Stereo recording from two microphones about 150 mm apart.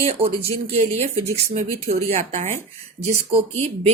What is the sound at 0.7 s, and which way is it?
Speech, 45° right (ahead or behind).